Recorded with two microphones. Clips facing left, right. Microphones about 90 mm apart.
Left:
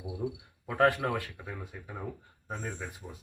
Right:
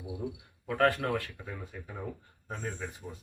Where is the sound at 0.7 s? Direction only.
15° left (ahead or behind).